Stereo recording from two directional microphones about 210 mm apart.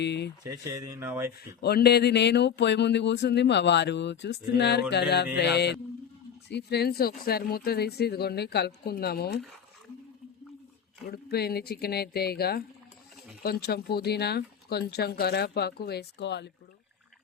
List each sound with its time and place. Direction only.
0.0 s a sound: 55° left (ahead or behind)
0.4 s speech: 15° right (ahead or behind)
1.6 s speech: 50° left (ahead or behind)
11.1 s speech: 50° left (ahead or behind)